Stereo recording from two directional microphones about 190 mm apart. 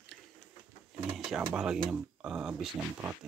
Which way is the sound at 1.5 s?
5° right (ahead or behind).